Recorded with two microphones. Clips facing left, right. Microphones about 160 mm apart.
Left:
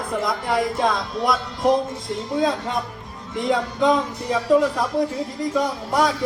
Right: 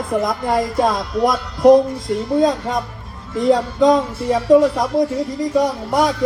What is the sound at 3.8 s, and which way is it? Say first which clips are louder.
Speech: right 5 dB; 40° right (ahead or behind).